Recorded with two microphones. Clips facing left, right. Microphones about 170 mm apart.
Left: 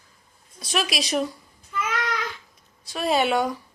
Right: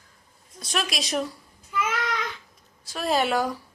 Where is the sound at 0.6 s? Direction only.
Centre (ahead or behind).